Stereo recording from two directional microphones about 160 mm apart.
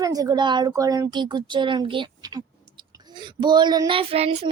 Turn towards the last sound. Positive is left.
turn(degrees=-40)  # may be behind; listen again after turning